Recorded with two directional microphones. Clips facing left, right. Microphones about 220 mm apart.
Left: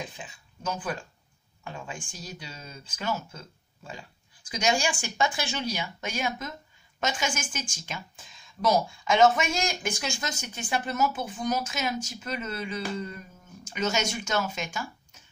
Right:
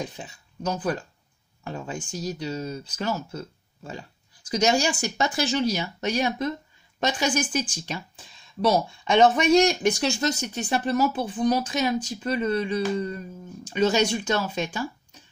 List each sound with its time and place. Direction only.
0.0 s speech: 40° right (ahead or behind)